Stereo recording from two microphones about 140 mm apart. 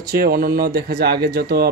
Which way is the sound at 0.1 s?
90° right.